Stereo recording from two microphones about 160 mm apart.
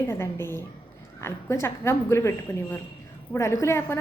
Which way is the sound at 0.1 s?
15° left (ahead or behind).